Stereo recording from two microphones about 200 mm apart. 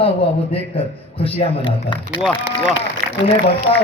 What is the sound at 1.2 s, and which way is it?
Speech, 25° left (ahead or behind).